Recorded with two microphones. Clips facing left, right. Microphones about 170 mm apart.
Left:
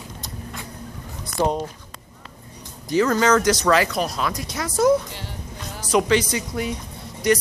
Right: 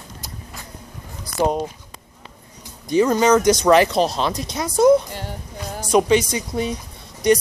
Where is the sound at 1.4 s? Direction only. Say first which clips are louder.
Right 2 dB; 15° right (ahead or behind).